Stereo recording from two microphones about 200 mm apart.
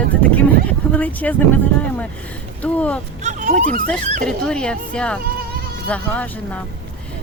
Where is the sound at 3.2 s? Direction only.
40° right (ahead or behind).